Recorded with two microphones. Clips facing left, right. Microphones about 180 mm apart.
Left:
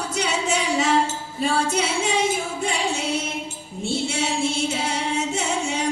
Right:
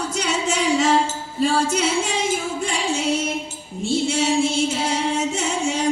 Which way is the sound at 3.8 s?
60° left (ahead or behind).